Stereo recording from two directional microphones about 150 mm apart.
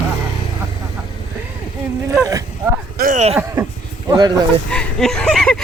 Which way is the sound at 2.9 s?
70° right (ahead or behind).